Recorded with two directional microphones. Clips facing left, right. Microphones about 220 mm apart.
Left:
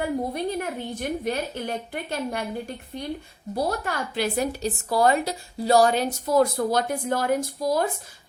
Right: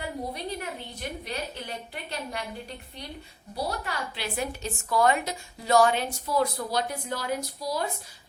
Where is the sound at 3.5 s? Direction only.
50° left (ahead or behind).